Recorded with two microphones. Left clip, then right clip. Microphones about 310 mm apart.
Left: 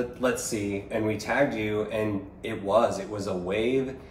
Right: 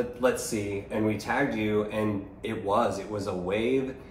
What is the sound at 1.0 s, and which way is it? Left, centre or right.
Speech, centre.